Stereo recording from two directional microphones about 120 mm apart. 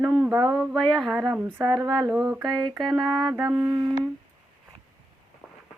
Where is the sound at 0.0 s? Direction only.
15° right (ahead or behind).